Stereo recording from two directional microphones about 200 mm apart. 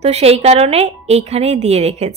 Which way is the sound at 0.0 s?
30° right (ahead or behind).